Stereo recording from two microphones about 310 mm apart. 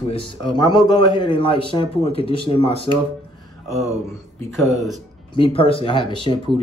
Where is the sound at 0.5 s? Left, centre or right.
Centre.